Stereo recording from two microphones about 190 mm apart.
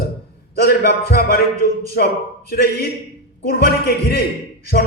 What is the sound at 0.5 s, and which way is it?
Speech, 55° left (ahead or behind).